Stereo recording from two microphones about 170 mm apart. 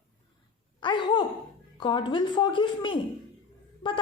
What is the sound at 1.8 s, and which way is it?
A woman's voice, 25° left (ahead or behind).